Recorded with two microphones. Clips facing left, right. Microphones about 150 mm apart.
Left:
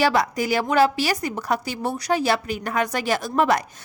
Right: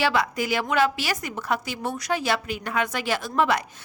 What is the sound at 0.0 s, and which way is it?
A woman's voice, 40° left (ahead or behind).